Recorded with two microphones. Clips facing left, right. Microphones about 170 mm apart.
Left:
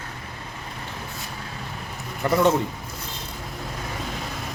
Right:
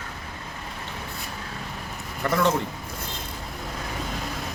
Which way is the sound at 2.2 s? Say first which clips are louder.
Left 3 dB; 15° left (ahead or behind).